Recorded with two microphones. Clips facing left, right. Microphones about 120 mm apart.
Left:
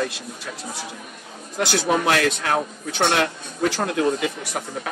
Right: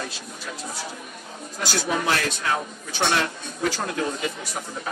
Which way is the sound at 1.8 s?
65° left (ahead or behind).